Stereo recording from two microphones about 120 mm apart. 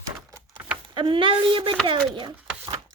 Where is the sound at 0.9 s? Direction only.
45° right (ahead or behind).